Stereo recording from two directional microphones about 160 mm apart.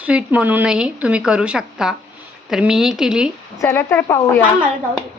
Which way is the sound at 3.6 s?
20° left (ahead or behind).